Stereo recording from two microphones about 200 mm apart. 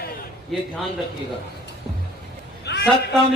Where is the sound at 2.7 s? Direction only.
60° left (ahead or behind).